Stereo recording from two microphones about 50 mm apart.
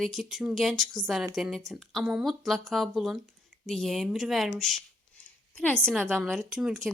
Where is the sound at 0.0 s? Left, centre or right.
Centre.